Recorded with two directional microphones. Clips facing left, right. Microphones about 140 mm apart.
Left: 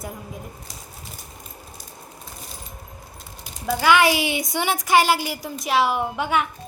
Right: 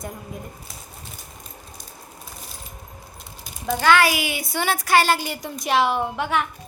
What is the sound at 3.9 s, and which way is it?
A woman's voice, 20° left (ahead or behind).